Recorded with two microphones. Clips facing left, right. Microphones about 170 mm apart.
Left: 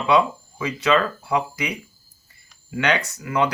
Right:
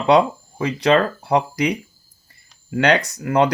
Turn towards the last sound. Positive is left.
turn(degrees=-40)  # may be behind; listen again after turning